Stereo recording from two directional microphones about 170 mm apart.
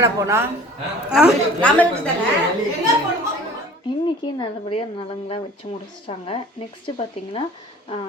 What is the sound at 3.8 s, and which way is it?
Speech, 25° left (ahead or behind).